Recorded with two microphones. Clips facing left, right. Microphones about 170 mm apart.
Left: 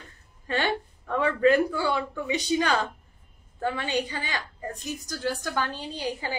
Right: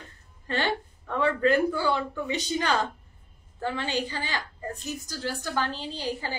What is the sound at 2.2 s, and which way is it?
A woman's voice, 10° left (ahead or behind).